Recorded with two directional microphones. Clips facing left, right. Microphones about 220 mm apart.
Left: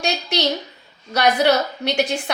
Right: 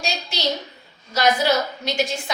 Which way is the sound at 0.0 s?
65° left (ahead or behind).